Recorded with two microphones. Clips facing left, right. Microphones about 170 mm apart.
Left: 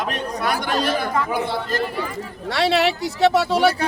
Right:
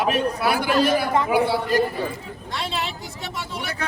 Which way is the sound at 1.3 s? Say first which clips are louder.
Right 3 dB; 10° right (ahead or behind).